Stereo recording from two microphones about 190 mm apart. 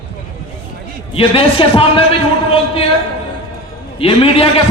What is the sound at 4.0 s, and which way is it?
Speech, 30° left (ahead or behind).